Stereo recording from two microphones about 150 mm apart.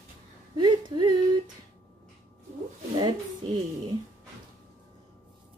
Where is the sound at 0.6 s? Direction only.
30° right (ahead or behind).